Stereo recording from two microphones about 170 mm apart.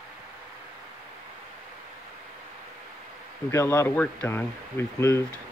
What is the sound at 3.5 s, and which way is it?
Speech, 15° left (ahead or behind).